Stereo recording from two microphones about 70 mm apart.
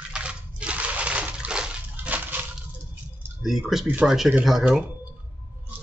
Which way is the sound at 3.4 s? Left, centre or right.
Centre.